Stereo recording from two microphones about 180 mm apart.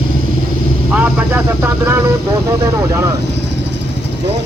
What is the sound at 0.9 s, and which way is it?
Speech, 10° right (ahead or behind).